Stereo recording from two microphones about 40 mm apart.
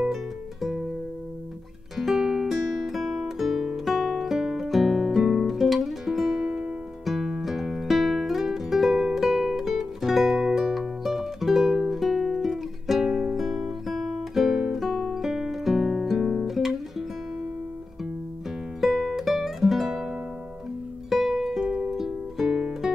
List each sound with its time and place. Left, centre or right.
0.1 s music: centre
2.0 s music: centre
6.4 s music: centre
7.1 s music: centre
18.8 s music: centre
21.3 s music: centre